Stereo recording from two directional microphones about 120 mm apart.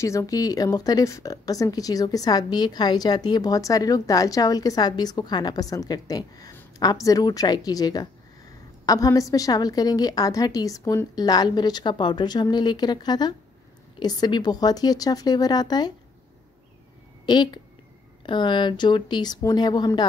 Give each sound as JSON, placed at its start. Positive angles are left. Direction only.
{"t": 0.0, "sound": "a woman's voice", "side_deg": 25}
{"t": 17.3, "sound": "a woman's voice", "side_deg": 40}